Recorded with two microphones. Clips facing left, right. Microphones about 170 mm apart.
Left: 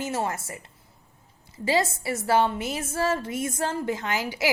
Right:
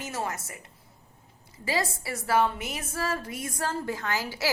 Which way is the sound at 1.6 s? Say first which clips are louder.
Left 5 dB; 25° left (ahead or behind).